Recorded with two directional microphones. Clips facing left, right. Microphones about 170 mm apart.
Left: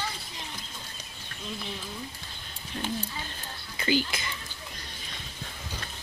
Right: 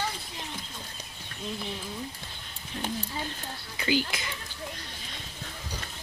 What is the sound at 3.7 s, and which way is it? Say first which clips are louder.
Speech: left 1 dB; 10° right (ahead or behind).